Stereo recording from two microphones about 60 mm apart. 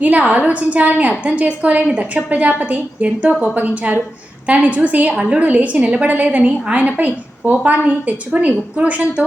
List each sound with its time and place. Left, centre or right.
0.0 s a woman's voice: right
5.1 s a woman's voice: centre
5.4 s a woman's voice: right